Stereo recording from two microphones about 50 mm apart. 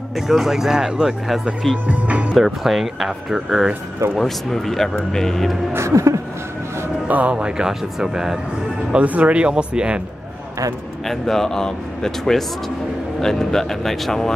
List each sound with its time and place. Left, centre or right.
0.3 s speech: centre
1.3 s speech: centre
1.9 s speech: right
2.3 s speech: centre
4.2 s a man's voice: centre
5.7 s a sound: right
7.1 s speech: right; by 8.4 s centre
9.0 s speech: right
11.1 s a man's voice: centre